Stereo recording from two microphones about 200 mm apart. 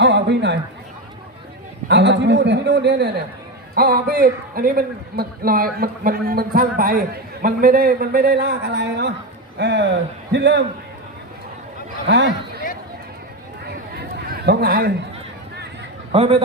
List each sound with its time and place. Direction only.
0.0 s a sound: 60° right (ahead or behind)
1.9 s a man's voice: 60° right (ahead or behind)
12.0 s a man's voice: 65° right (ahead or behind)
14.3 s a man's voice: 55° right (ahead or behind)
16.1 s a man's voice: 30° right (ahead or behind)